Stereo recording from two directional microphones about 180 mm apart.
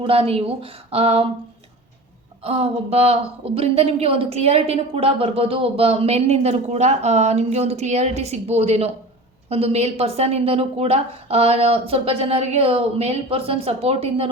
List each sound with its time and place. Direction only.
0.0 s a woman's voice: 30° right (ahead or behind)
2.4 s a woman's voice: 35° right (ahead or behind)